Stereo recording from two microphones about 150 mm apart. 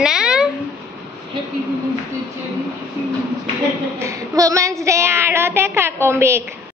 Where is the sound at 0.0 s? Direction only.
5° right (ahead or behind).